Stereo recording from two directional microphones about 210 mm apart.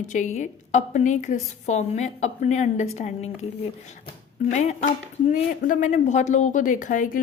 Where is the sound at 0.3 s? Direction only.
35° left (ahead or behind).